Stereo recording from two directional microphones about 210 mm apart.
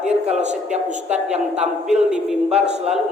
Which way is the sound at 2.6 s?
30° right (ahead or behind).